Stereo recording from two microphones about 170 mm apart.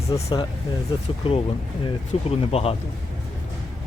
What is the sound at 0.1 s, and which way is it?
Speech, 25° left (ahead or behind).